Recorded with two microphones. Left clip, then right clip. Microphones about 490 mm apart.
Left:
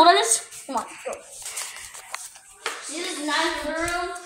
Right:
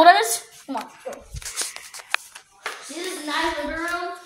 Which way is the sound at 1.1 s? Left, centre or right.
Right.